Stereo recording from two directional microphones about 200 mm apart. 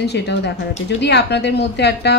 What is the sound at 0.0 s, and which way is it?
A woman's voice, 55° left (ahead or behind).